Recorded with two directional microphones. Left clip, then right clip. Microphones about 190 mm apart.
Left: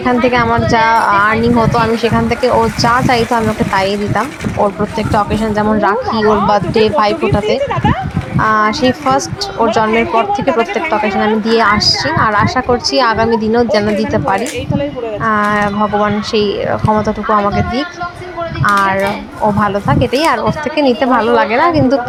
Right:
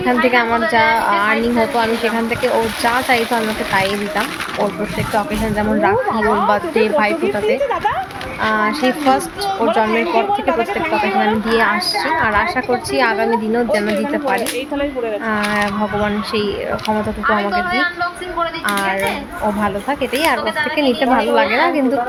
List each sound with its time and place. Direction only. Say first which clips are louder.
0.0 s speech: left 2 dB; 15° left (ahead or behind)
2.8 s speech: left 2 dB; 15° left (ahead or behind)
5.1 s speech: left 5 dB; 15° left (ahead or behind)
8.4 s speech: left 5 dB; 15° left (ahead or behind)
9.8 s speech: left 4 dB; centre (ahead or behind)
11.4 s speech: left 5 dB; 15° left (ahead or behind)
15.5 s speech: left 5 dB; 15° left (ahead or behind)